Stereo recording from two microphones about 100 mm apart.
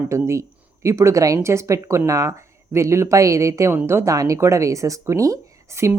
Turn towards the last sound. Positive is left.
turn(degrees=-30)  # may be behind; listen again after turning